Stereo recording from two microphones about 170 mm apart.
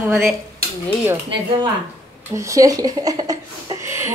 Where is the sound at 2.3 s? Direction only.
20° right (ahead or behind).